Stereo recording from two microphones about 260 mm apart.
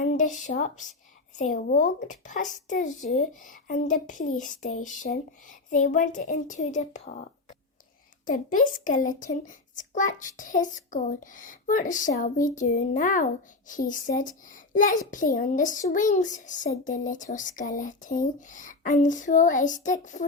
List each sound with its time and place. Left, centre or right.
0.2 s a child's voice: left
8.2 s a child's voice: left